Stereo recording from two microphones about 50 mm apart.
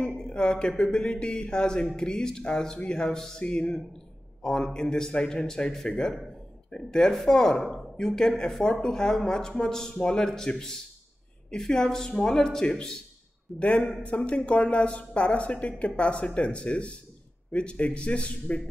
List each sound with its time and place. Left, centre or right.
0.2 s speech: centre
13.6 s speech: left